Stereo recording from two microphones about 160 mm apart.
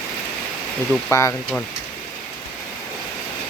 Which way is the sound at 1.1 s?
20° left (ahead or behind).